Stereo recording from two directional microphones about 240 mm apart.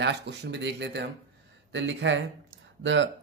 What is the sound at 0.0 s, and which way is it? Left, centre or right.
Speech, right.